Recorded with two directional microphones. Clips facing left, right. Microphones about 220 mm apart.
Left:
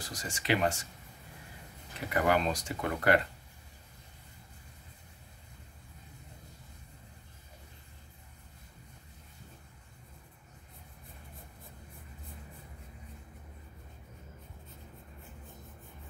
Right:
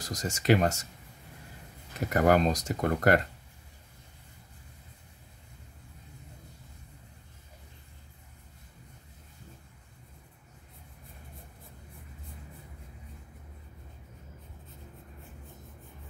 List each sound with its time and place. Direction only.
0.0 s speech: 40° right (ahead or behind)
2.0 s speech: 45° right (ahead or behind)